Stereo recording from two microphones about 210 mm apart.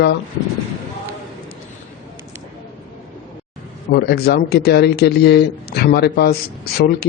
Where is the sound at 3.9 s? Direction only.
50° left (ahead or behind).